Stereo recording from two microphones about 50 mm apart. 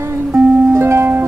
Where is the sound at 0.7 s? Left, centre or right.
Right.